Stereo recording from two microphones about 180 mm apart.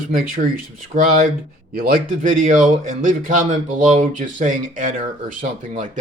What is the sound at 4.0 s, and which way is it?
Speech, 45° right (ahead or behind).